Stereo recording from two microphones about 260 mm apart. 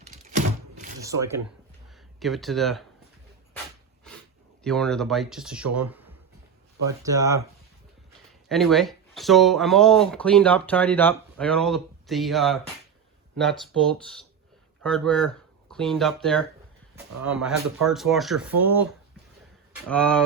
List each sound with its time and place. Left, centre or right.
0.0 s a sound: right
1.0 s speech: centre
2.1 s speech: centre
4.6 s speech: centre
8.4 s speech: centre
19.9 s speech: centre